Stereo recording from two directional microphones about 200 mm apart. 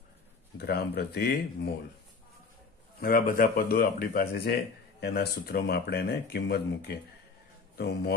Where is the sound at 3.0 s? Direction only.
45° left (ahead or behind).